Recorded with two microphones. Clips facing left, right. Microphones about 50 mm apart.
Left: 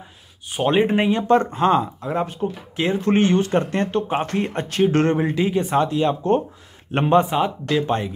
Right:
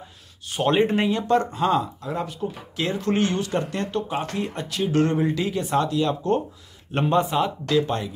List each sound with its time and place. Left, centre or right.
0.5 s speech: centre
1.0 s speech: left
5.1 s speech: left